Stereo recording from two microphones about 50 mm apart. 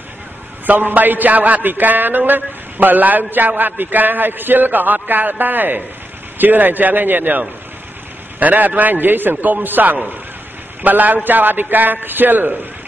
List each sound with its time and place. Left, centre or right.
0.7 s a man's voice: right